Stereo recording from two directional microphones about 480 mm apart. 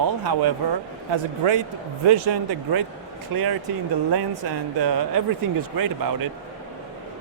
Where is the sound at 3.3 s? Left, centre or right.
Right.